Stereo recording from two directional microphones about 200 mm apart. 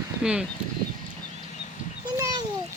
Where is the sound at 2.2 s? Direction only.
20° right (ahead or behind).